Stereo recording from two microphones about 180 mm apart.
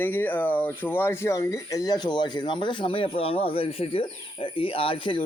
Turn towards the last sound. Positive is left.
turn(degrees=30)  # may be behind; listen again after turning